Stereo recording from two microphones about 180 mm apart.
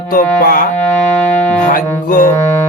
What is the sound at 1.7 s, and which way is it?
Mantra, 50° left (ahead or behind).